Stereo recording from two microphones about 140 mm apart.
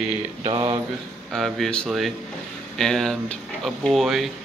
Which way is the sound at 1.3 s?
Centre (ahead or behind).